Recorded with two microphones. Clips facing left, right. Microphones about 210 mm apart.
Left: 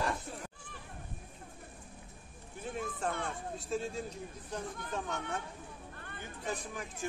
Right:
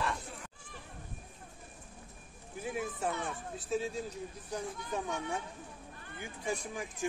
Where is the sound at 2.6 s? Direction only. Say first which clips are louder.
Right 1 dB; 10° right (ahead or behind).